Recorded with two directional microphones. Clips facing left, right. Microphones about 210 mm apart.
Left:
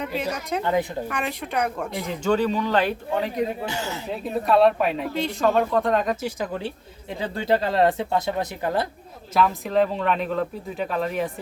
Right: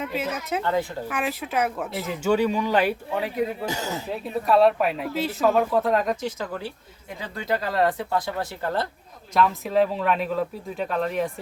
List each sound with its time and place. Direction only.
0.0 s speech: centre (ahead or behind)
0.6 s a woman's voice: 15° left (ahead or behind)
1.0 s speech: 5° right (ahead or behind)
3.7 s speech: 40° right (ahead or behind)
4.4 s speech: centre (ahead or behind)
6.2 s speech: 20° left (ahead or behind)
9.3 s speech: centre (ahead or behind)